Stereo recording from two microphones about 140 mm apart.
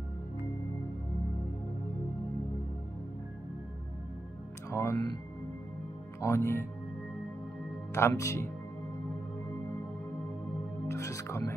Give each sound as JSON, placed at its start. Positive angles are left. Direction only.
{"t": 4.6, "sound": "speech", "side_deg": 20}
{"t": 6.2, "sound": "speech", "side_deg": 20}
{"t": 7.9, "sound": "speech", "side_deg": 20}
{"t": 10.9, "sound": "music", "side_deg": 20}